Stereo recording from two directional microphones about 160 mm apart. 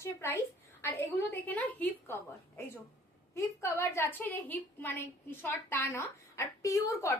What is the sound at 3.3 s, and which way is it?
A woman's voice, 15° left (ahead or behind).